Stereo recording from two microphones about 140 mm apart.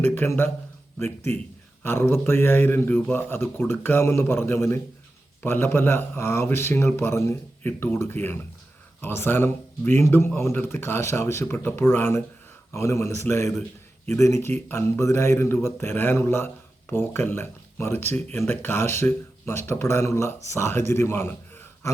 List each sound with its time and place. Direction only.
0.0 s speech: 15° left (ahead or behind)
1.8 s a man's voice: 15° left (ahead or behind)